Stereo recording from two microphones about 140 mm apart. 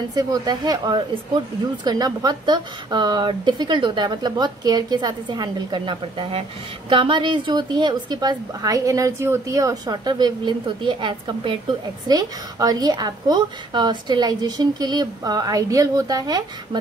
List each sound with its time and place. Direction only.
0.1 s a woman's voice: 30° right (ahead or behind)